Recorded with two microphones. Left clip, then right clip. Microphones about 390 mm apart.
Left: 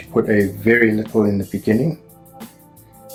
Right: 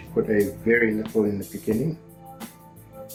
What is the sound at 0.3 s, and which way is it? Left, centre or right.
Speech, left.